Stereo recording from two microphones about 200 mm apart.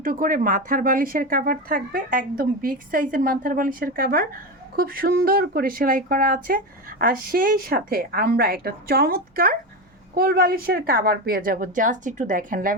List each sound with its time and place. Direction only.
0.0 s speech: 45° right (ahead or behind)